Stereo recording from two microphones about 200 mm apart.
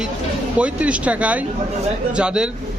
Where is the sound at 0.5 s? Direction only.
5° right (ahead or behind).